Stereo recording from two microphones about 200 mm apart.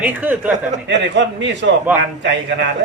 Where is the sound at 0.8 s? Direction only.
65° right (ahead or behind).